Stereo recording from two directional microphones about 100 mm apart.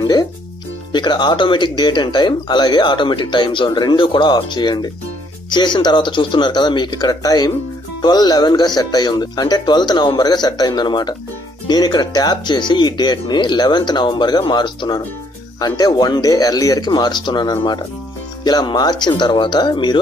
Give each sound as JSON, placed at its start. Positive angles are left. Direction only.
{"t": 0.0, "sound": "speech", "side_deg": 45}
{"t": 16.9, "sound": "speech", "side_deg": 50}